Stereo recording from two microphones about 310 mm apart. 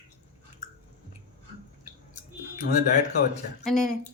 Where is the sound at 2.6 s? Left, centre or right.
Left.